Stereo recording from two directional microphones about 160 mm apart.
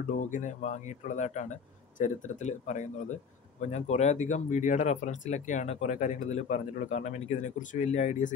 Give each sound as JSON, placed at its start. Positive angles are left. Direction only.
{"t": 0.2, "sound": "speech", "side_deg": 50}